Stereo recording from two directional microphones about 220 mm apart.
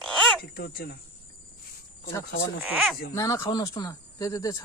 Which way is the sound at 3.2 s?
15° left (ahead or behind).